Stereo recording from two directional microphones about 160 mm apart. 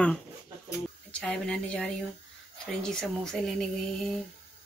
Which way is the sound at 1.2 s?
5° left (ahead or behind).